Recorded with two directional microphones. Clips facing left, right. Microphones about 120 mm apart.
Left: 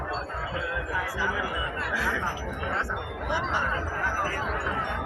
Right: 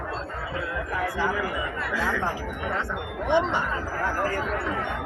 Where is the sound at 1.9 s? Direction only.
Centre (ahead or behind).